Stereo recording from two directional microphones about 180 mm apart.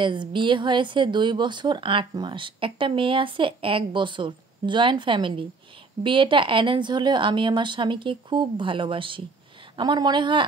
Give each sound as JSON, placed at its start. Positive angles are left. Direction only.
{"t": 0.0, "sound": "speech", "side_deg": -25}